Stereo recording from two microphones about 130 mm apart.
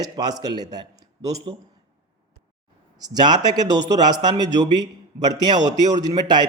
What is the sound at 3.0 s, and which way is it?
A man's voice, 30° right (ahead or behind).